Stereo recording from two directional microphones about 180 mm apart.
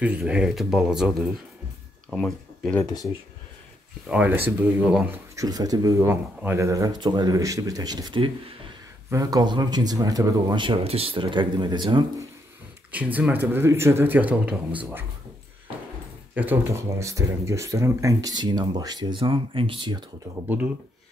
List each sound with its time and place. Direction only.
0.0 s speech: 5° right (ahead or behind)
2.8 s speech: 20° left (ahead or behind)
4.1 s speech: 10° right (ahead or behind); by 12.3 s 25° right (ahead or behind)
12.9 s speech: 5° right (ahead or behind)
16.3 s speech: 10° right (ahead or behind)
20.4 s speech: 10° right (ahead or behind)